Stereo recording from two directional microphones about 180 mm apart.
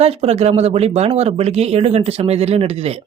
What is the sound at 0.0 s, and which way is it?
Speech, 35° right (ahead or behind).